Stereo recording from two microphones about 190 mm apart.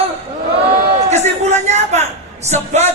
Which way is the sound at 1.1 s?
35° right (ahead or behind).